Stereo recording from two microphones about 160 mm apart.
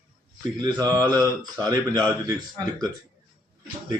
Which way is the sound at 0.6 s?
25° right (ahead or behind).